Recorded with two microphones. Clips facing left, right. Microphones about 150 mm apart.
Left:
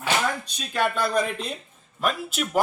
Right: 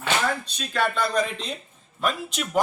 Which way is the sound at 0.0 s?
10° left (ahead or behind).